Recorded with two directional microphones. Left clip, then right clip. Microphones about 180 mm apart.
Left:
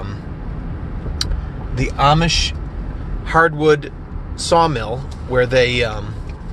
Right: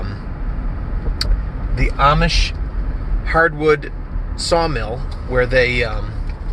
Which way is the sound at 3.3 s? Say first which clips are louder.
Left 1 dB; 15° left (ahead or behind).